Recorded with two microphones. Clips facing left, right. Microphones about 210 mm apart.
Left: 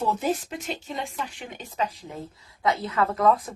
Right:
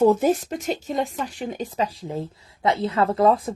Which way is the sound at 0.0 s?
45° right (ahead or behind).